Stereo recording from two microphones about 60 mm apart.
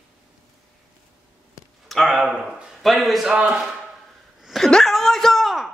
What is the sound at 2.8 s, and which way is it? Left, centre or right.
Speech, centre.